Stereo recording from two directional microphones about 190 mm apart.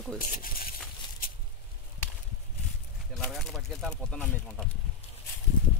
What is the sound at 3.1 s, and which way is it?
Speech, centre (ahead or behind).